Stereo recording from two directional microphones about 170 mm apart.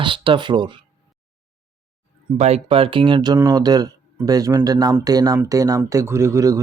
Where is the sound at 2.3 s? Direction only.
40° right (ahead or behind).